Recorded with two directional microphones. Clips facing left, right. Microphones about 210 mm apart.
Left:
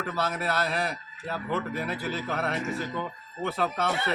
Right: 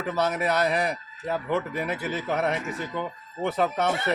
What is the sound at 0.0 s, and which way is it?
Speech, 15° right (ahead or behind).